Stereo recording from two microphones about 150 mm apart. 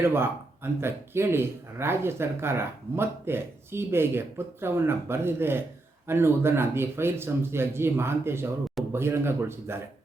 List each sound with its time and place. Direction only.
0.0 s speech: 15° right (ahead or behind)